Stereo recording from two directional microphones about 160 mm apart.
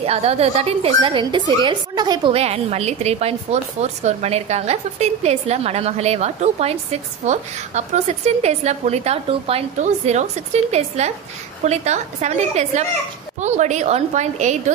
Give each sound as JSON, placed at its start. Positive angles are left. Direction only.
{"t": 0.0, "sound": "a woman's voice", "side_deg": -40}